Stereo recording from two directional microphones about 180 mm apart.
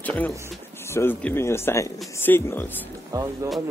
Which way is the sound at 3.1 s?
20° right (ahead or behind).